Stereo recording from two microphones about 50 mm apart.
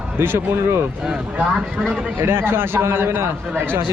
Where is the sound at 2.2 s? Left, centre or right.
Right.